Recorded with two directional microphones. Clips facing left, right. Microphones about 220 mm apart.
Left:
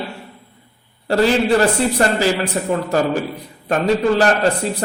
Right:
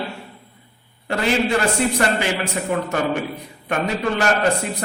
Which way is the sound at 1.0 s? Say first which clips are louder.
Left 5 dB; 35° left (ahead or behind).